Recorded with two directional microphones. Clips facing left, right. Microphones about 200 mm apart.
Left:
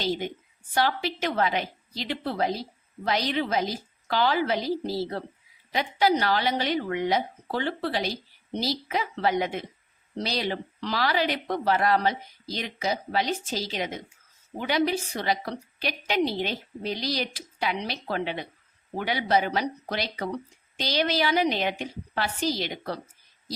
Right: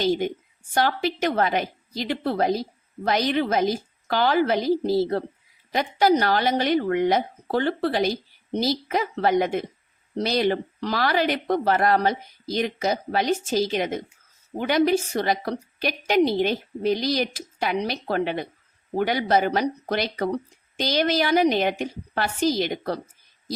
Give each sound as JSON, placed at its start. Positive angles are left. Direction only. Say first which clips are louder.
{"t": 0.7, "sound": "a woman's voice", "louder": "right 3 dB", "side_deg": -50}